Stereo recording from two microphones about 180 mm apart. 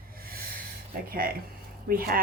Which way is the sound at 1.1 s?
55° right (ahead or behind).